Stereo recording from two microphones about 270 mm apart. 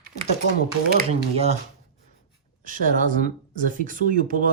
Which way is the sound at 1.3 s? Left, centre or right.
Right.